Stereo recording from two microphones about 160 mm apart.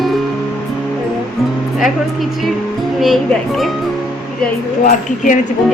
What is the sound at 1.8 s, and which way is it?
Speech, centre (ahead or behind).